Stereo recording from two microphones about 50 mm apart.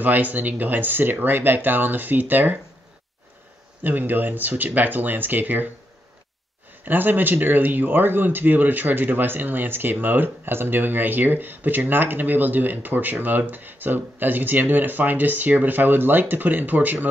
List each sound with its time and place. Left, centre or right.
0.0 s speech: right
3.8 s speech: right
6.8 s speech: right